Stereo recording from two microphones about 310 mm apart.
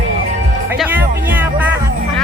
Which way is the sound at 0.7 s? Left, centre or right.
Centre.